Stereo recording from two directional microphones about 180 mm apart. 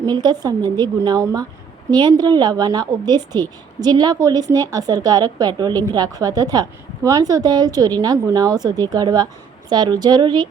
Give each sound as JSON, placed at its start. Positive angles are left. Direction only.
{"t": 0.0, "sound": "speech", "side_deg": -25}